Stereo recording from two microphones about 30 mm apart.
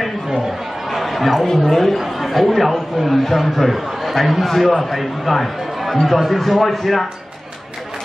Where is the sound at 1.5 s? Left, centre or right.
Centre.